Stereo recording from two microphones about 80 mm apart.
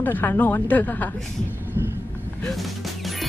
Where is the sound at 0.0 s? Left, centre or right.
Left.